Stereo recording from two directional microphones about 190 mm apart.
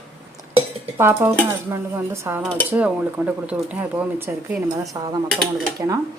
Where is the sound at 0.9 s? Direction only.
15° right (ahead or behind).